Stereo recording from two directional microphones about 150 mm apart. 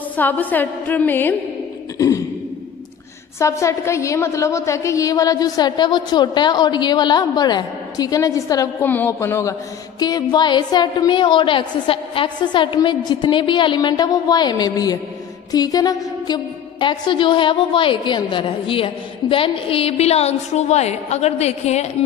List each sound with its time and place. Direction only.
0.1 s a woman's voice: 10° left (ahead or behind)
2.0 s a sound: 20° left (ahead or behind)
3.3 s a woman's voice: 20° left (ahead or behind)
8.8 s a woman's voice: 15° left (ahead or behind); by 21.8 s 45° left (ahead or behind)